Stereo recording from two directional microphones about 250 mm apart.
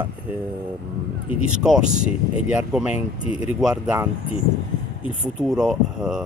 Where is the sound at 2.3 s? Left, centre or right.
Centre.